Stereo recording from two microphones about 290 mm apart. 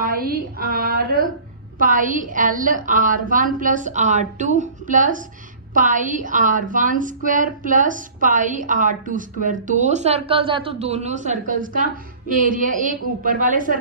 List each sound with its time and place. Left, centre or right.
0.0 s a woman's voice: right